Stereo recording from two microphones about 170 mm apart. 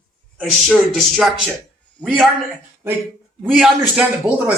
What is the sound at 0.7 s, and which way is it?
A man's voice, centre (ahead or behind).